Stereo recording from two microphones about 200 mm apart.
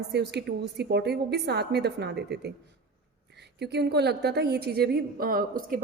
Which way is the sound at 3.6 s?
55° right (ahead or behind).